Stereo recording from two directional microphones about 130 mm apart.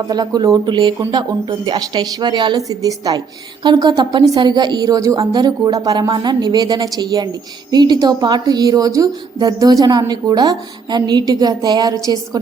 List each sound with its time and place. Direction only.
0.1 s a woman's voice: 30° right (ahead or behind)